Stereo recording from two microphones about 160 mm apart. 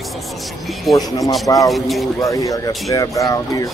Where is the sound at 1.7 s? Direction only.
Centre (ahead or behind).